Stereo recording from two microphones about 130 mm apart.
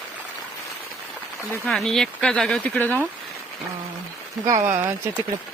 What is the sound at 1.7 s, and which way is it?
Speech, 5° left (ahead or behind).